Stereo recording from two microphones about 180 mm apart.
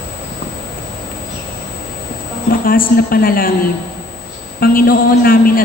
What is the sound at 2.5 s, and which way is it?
A man's voice, 55° left (ahead or behind).